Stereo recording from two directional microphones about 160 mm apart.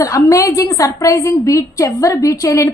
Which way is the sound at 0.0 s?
20° left (ahead or behind).